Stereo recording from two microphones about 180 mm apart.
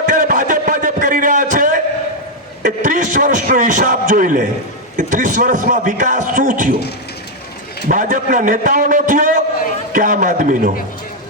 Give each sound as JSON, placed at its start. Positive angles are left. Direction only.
{"t": 0.1, "sound": "a sound", "side_deg": -50}
{"t": 2.6, "sound": "a man's voice", "side_deg": -45}
{"t": 7.9, "sound": "a man's voice", "side_deg": -50}